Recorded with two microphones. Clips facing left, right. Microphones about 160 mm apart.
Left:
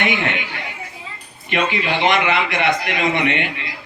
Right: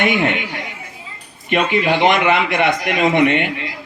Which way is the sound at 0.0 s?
50° right (ahead or behind).